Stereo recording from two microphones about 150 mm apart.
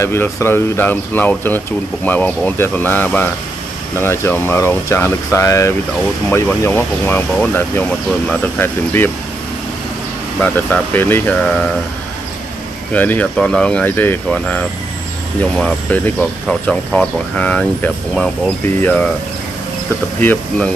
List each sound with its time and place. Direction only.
0.0 s speech: 15° left (ahead or behind)
10.4 s speech: 10° left (ahead or behind)
12.9 s speech: 10° left (ahead or behind)
20.2 s speech: 10° left (ahead or behind)